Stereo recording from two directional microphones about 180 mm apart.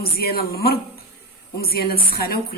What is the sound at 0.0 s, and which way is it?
A woman's voice, 60° left (ahead or behind).